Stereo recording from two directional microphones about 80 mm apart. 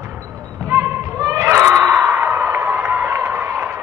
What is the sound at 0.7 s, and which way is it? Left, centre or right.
Basketball bounce, right.